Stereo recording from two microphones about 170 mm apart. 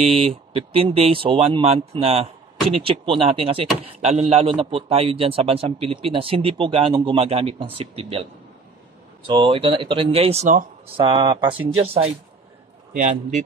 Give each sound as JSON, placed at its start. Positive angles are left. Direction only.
{"t": 0.0, "sound": "a man's voice", "side_deg": -35}
{"t": 9.3, "sound": "a man's voice", "side_deg": -30}
{"t": 11.0, "sound": "a man's voice", "side_deg": -30}
{"t": 12.9, "sound": "a man's voice", "side_deg": -50}